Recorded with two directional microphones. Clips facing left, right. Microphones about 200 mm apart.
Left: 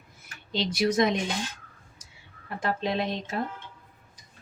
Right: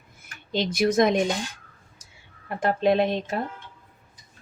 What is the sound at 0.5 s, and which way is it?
Speech, 50° right (ahead or behind).